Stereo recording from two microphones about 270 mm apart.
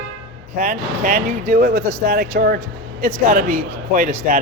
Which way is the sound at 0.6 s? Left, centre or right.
Right.